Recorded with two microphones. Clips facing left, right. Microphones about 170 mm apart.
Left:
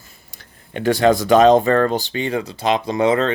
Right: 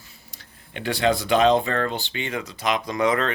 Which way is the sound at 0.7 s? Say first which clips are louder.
Left 7 dB; 45° left (ahead or behind).